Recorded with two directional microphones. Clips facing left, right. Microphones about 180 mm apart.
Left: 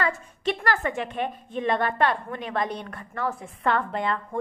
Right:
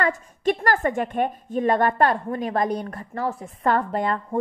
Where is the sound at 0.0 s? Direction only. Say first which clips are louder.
Right 4 dB; 45° right (ahead or behind).